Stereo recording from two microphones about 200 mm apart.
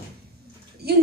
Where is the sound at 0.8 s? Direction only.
50° right (ahead or behind).